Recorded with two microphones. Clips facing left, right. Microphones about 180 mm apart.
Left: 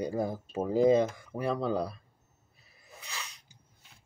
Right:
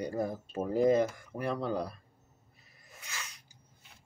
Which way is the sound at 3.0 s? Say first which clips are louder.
Left 2 dB; 35° left (ahead or behind).